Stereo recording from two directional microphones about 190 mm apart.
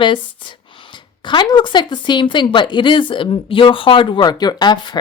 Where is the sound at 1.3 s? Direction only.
25° left (ahead or behind).